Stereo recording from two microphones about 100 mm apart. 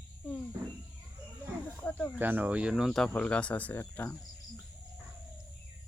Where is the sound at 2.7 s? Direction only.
Centre (ahead or behind); by 4.2 s 20° left (ahead or behind).